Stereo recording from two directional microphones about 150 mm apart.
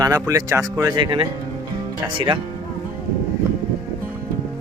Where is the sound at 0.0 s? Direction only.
25° right (ahead or behind).